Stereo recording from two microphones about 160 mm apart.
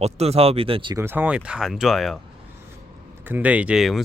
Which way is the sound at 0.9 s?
15° right (ahead or behind).